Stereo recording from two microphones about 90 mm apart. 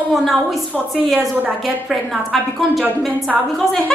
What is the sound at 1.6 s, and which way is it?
Speech, centre (ahead or behind).